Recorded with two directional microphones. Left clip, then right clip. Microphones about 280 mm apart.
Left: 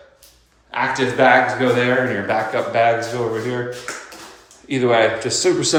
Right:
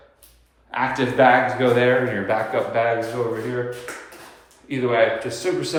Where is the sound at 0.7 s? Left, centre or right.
Centre.